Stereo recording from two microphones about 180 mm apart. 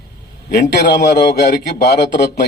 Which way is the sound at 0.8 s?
65° left (ahead or behind).